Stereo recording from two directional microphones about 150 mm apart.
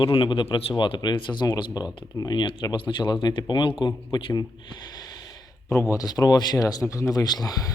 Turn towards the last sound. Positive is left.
turn(degrees=25)  # may be behind; listen again after turning